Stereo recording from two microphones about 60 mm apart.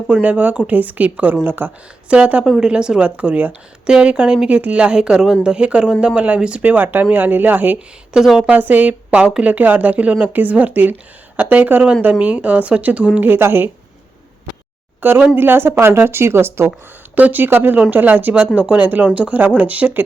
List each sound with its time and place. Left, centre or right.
0.1 s speech: right
2.0 s a woman's voice: centre
3.8 s a woman's voice: centre; by 7.8 s right
8.1 s a woman's voice: centre
8.4 s speech: right
13.1 s speech: right
15.0 s speech: right
17.2 s speech: right